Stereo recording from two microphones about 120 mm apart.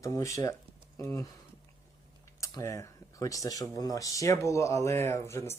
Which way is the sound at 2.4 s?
25° left (ahead or behind).